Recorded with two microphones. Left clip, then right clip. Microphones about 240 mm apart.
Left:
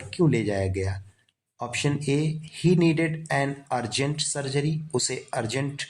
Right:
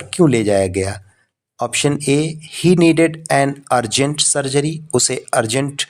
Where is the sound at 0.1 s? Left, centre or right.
Right.